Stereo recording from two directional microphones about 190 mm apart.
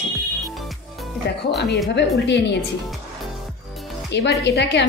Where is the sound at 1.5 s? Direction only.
65° left (ahead or behind).